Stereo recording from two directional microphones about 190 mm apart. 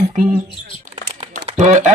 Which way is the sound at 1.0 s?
35° right (ahead or behind).